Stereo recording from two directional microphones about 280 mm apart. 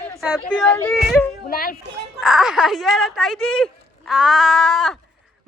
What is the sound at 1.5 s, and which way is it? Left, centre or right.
Speech, left.